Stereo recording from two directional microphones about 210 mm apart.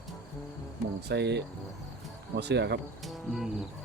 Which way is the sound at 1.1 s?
55° right (ahead or behind).